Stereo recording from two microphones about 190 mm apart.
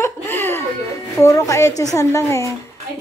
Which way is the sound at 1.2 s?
15° left (ahead or behind).